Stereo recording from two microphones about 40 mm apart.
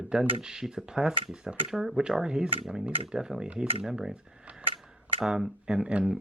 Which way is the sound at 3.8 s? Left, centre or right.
Centre.